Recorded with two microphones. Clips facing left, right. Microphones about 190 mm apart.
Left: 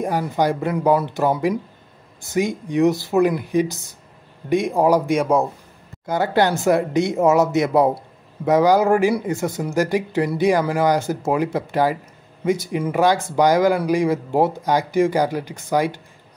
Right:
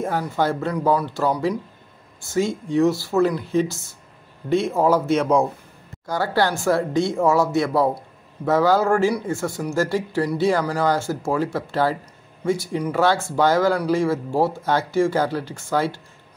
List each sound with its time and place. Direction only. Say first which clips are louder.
0.0 s speech: left 2 dB; 15° left (ahead or behind)
6.0 s speech: left 3 dB; 20° left (ahead or behind)